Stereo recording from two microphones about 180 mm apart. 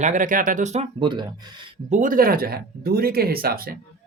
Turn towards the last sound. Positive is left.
turn(degrees=-55)  # may be behind; listen again after turning